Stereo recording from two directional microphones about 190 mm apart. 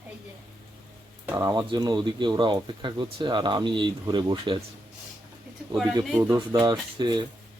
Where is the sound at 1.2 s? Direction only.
15° right (ahead or behind).